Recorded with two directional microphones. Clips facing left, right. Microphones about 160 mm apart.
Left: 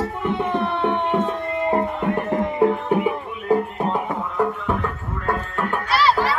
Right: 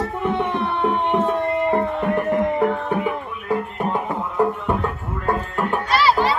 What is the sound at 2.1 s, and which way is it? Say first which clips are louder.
Music: right 3 dB; 25° left (ahead or behind).